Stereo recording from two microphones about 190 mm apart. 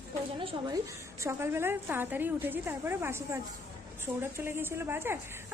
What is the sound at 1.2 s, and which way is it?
A woman's voice, 15° right (ahead or behind).